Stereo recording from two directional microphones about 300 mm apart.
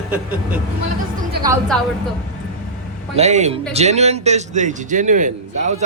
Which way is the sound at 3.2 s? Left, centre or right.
Right.